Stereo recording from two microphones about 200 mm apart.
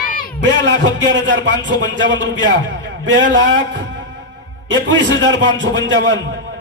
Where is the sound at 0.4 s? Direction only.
65° right (ahead or behind).